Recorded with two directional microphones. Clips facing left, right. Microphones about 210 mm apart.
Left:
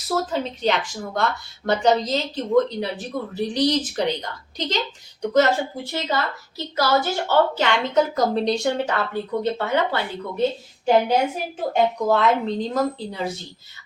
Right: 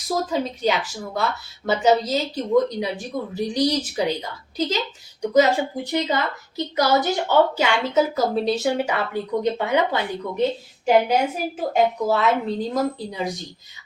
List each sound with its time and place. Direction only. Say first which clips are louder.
0.1 s speech: right 1 dB; 10° right (ahead or behind)
11.7 s speech: left 1 dB; 5° right (ahead or behind)